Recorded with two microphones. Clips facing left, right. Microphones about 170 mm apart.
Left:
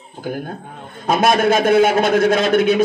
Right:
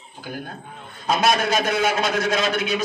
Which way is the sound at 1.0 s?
50° left (ahead or behind).